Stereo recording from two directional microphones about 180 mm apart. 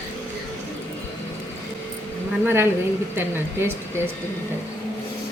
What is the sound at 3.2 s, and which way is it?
Speech, 10° right (ahead or behind).